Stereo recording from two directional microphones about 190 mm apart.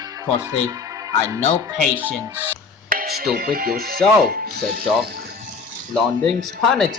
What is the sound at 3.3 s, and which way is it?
Speech, 50° right (ahead or behind).